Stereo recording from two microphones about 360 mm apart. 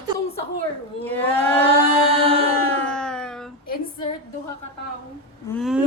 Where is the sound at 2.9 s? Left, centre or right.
Centre.